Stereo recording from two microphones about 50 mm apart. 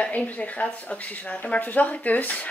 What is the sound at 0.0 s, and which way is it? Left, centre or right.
Speech, left.